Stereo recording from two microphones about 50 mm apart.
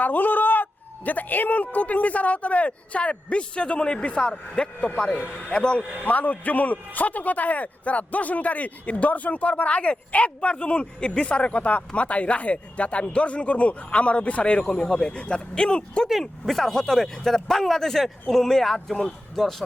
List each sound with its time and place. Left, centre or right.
0.0 s a man's voice: left
6.0 s a man's voice: left
14.6 s speech: centre
16.2 s speech: centre